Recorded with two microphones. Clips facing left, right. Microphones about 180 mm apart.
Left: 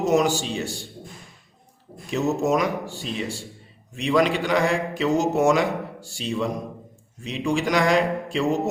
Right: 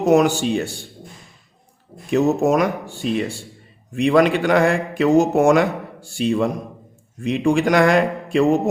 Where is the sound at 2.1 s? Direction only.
55° right (ahead or behind).